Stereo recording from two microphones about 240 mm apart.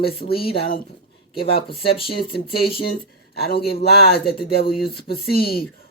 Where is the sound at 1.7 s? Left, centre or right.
Left.